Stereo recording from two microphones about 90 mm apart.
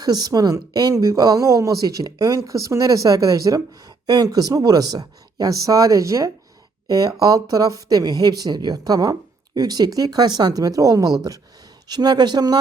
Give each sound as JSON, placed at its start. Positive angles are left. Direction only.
{"t": 0.0, "sound": "speech", "side_deg": -45}
{"t": 11.9, "sound": "speech", "side_deg": -50}